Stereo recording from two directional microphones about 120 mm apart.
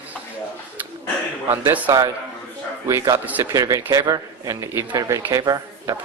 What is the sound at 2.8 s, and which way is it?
A man's voice, 25° right (ahead or behind).